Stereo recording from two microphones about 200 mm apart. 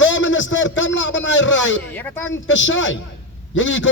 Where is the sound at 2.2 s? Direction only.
70° left (ahead or behind).